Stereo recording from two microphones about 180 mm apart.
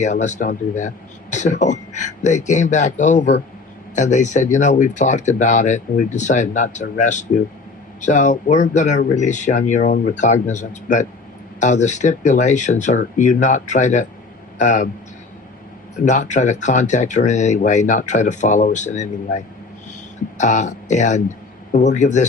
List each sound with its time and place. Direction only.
0.0 s speech: 40° left (ahead or behind)
16.0 s speech: 40° left (ahead or behind)
20.4 s speech: 40° left (ahead or behind)